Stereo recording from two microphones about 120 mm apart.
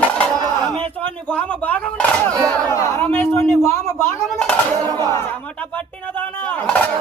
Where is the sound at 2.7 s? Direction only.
25° left (ahead or behind).